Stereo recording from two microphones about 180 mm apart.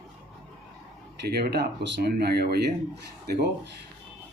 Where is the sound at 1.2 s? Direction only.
65° right (ahead or behind).